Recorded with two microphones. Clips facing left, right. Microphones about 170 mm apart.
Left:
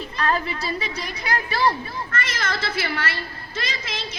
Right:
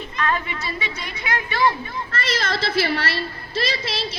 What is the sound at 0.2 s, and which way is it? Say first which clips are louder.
A woman's voice: left 1 dB; 35° left (ahead or behind).